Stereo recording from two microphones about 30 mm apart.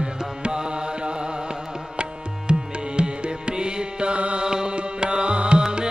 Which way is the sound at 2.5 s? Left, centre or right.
Right.